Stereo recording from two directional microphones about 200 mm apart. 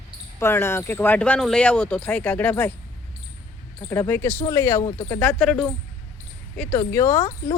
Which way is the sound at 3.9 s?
10° left (ahead or behind).